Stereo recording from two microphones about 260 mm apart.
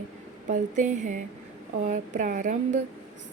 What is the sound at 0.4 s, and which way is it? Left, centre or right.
A woman's voice, right.